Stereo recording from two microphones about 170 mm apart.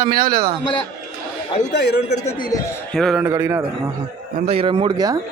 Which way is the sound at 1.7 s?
80° left.